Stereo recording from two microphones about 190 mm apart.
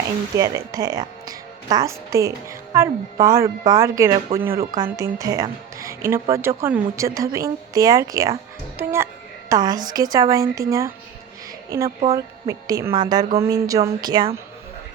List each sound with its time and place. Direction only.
0.3 s a woman's voice: 15° right (ahead or behind)
12.1 s a woman's voice: 15° right (ahead or behind)